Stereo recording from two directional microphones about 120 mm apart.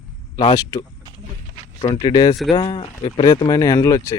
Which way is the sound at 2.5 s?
50° left (ahead or behind).